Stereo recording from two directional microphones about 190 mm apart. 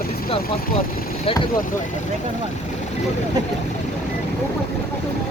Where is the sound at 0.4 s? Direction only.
50° left (ahead or behind).